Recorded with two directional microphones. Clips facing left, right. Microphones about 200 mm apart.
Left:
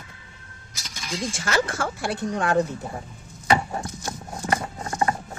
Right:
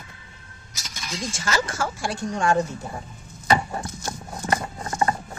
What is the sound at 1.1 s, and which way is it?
Speech, 60° left (ahead or behind).